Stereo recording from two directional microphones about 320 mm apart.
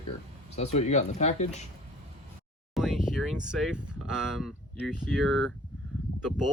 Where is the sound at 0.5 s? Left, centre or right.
Centre.